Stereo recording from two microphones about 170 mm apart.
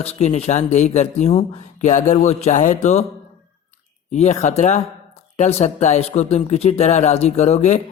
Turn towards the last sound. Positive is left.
turn(degrees=40)  # may be behind; listen again after turning